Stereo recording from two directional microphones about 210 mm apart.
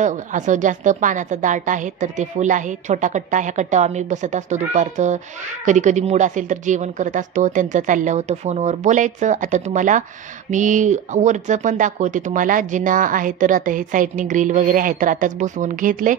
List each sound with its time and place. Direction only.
0.0 s speech: 35° right (ahead or behind)